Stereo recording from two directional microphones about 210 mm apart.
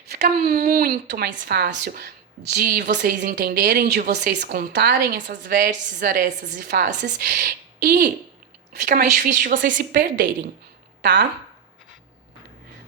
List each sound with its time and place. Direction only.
0.1 s speech: 45° right (ahead or behind)
8.8 s a woman's voice: 40° right (ahead or behind)
11.0 s speech: 55° right (ahead or behind)